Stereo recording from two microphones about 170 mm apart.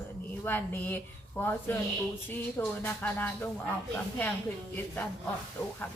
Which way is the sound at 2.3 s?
10° left (ahead or behind).